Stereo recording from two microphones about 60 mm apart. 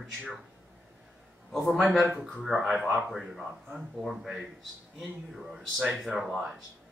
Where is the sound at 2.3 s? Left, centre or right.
Centre.